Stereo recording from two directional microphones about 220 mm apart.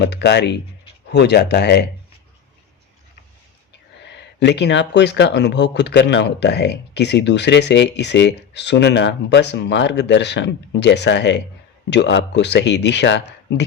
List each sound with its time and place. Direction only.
0.0 s speech: 50° left (ahead or behind)
4.0 s speech: 50° left (ahead or behind)